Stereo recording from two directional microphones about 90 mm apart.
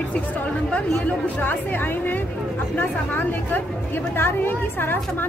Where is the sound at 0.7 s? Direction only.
10° left (ahead or behind).